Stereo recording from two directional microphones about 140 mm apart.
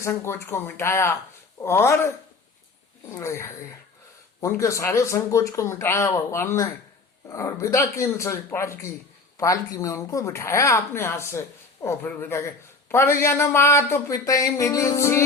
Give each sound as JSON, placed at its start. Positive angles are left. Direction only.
{"t": 0.0, "sound": "speech", "side_deg": 15}